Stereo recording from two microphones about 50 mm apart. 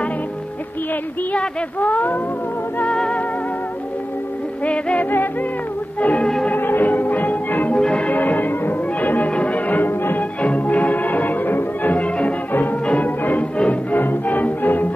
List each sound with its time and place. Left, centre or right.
1.8 s speech: left
2.9 s music: centre
4.6 s music: left
6.5 s music: left
7.7 s change ringing: left
8.1 s music: left
10.4 s music: left